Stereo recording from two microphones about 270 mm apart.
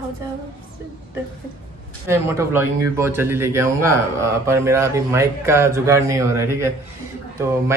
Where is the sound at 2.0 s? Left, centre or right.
Centre.